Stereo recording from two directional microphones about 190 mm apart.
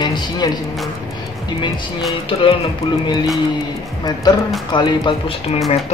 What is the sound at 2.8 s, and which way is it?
Music, 35° left (ahead or behind).